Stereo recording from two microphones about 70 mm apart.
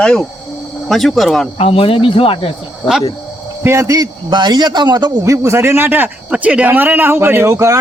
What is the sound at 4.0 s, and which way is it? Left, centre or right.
A man's voice, right.